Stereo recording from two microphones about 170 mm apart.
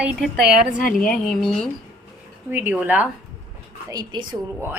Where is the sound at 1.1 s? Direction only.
Centre (ahead or behind).